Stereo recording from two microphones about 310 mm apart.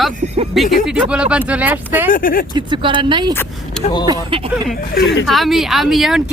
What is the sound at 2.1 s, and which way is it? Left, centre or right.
Speech, left.